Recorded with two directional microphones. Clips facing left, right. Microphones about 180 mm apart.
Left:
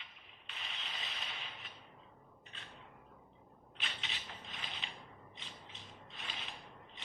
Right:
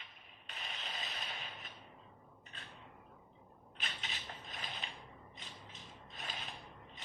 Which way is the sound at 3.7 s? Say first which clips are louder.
Even; 40° right (ahead or behind).